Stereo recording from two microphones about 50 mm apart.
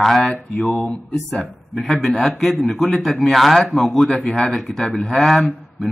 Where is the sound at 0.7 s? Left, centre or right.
Left.